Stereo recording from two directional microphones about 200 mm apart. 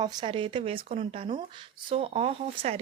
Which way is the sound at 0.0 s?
20° right (ahead or behind).